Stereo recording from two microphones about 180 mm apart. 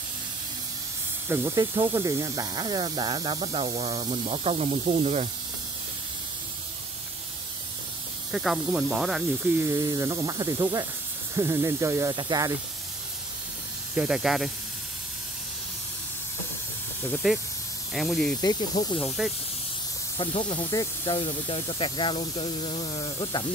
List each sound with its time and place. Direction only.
1.3 s speech: 15° right (ahead or behind); by 5.3 s 35° right (ahead or behind)
8.3 s speech: centre (ahead or behind)
9.7 s speech: 20° right (ahead or behind)
13.9 s speech: 5° right (ahead or behind)
17.1 s speech: centre (ahead or behind)
20.2 s speech: 25° left (ahead or behind)